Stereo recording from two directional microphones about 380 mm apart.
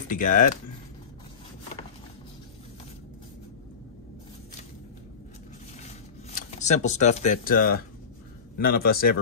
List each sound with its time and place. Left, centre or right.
0.1 s a man's voice: left
5.8 s a sound: centre
8.5 s a man's voice: left